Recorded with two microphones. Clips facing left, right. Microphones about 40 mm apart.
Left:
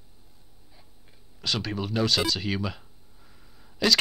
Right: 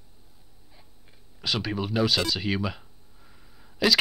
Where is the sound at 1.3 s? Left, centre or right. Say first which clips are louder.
Right 1 dB; centre.